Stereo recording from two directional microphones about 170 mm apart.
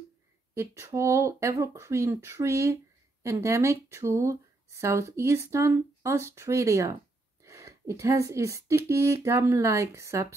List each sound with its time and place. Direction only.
0.6 s speech: 15° right (ahead or behind)